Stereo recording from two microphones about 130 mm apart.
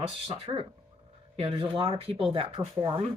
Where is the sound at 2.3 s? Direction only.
35° right (ahead or behind).